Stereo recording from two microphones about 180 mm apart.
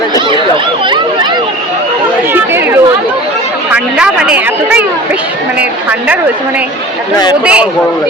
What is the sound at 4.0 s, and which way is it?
Speech, 5° right (ahead or behind).